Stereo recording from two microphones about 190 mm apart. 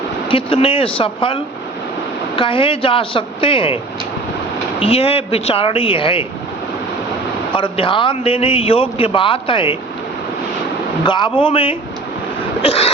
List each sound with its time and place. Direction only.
0.3 s a man's voice: 30° left (ahead or behind)
4.8 s speech: 30° left (ahead or behind)
7.5 s a man's voice: 25° left (ahead or behind)
11.0 s a man's voice: 25° left (ahead or behind)